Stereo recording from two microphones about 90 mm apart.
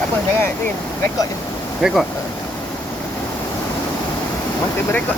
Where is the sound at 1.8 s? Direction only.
5° right (ahead or behind).